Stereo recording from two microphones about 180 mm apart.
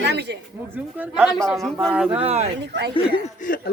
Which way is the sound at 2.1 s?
35° right (ahead or behind).